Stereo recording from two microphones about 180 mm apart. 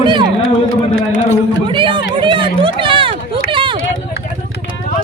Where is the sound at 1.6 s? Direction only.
25° right (ahead or behind).